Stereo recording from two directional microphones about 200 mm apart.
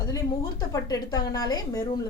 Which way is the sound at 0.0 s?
15° left (ahead or behind).